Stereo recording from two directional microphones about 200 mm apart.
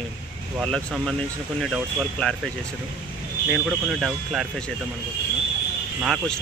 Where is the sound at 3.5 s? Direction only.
5° right (ahead or behind).